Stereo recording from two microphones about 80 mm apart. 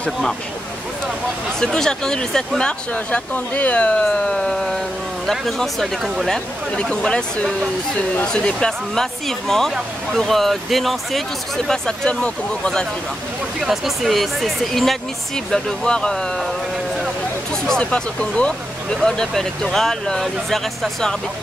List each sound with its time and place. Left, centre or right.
1.6 s speech: centre
13.6 s speech: centre
17.6 s speech: centre